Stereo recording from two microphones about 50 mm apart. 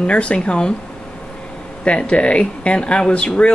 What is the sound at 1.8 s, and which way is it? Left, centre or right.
Speech, left.